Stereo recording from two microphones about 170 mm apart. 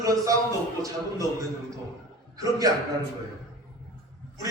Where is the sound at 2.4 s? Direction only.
20° right (ahead or behind).